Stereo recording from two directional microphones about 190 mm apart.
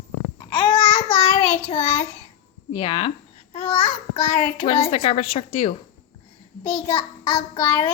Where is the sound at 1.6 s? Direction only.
30° left (ahead or behind).